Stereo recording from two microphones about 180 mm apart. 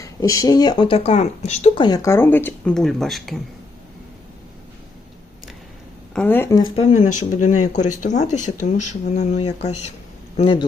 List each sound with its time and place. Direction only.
0.0 s speech: 20° left (ahead or behind); by 1.8 s 35° left (ahead or behind)
1.8 s speech: 20° left (ahead or behind); by 3.4 s centre (ahead or behind)
6.1 s speech: 10° left (ahead or behind)
6.7 s speech: 40° left (ahead or behind)
10.3 s speech: 30° left (ahead or behind)